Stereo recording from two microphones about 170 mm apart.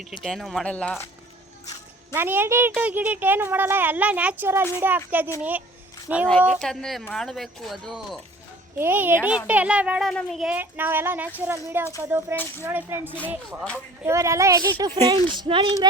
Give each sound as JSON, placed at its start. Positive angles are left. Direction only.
{"t": 0.2, "sound": "speech", "side_deg": 0}
{"t": 2.1, "sound": "speech", "side_deg": -15}
{"t": 8.8, "sound": "speech", "side_deg": -10}